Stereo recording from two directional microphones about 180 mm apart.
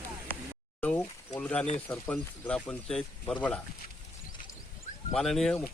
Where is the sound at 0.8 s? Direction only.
10° left (ahead or behind).